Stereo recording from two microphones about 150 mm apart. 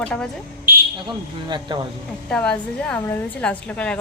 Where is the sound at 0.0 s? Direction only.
5° left (ahead or behind).